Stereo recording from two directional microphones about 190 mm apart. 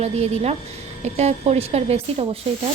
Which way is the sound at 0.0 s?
35° right (ahead or behind).